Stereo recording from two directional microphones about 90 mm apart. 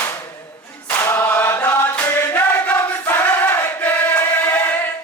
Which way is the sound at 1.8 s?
20° left (ahead or behind).